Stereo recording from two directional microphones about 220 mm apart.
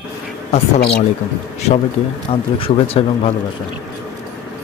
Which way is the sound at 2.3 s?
25° left (ahead or behind).